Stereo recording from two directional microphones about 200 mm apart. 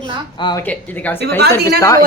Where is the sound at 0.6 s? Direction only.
10° left (ahead or behind).